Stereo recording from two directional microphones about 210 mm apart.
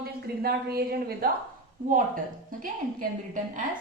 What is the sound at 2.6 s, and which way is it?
A woman's voice, 40° right (ahead or behind).